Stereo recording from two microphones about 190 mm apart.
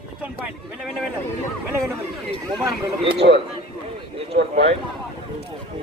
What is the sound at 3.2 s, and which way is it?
Speech, 45° right (ahead or behind).